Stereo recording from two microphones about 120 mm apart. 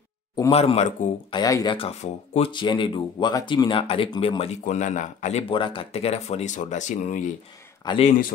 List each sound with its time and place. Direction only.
0.5 s speech: 60° left (ahead or behind)
1.3 s speech: 30° left (ahead or behind)
1.8 s speech: 60° left (ahead or behind)
2.5 s speech: 40° left (ahead or behind)
4.4 s speech: 75° left (ahead or behind)
5.5 s speech: 45° left (ahead or behind); by 7.2 s 90° left